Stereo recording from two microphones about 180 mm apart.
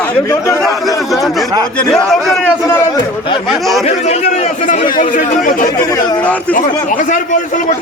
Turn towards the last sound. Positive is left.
turn(degrees=45)  # may be behind; listen again after turning